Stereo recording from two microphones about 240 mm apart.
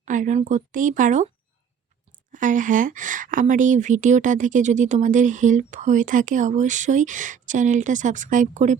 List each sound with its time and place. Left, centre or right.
0.0 s a woman's voice: right
2.3 s a woman's voice: right